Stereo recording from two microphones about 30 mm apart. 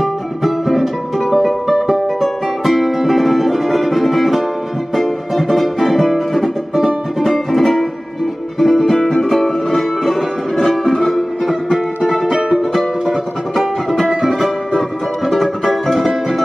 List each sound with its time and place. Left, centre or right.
0.0 s music: centre
10.5 s music: centre
13.6 s music: centre